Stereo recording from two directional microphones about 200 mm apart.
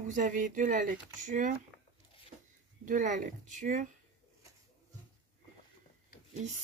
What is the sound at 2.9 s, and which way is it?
Speech, 40° right (ahead or behind).